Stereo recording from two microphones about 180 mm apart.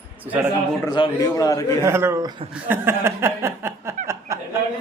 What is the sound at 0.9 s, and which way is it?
Speech, 25° left (ahead or behind).